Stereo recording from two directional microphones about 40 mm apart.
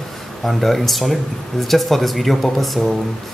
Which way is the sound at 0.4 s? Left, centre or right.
Centre.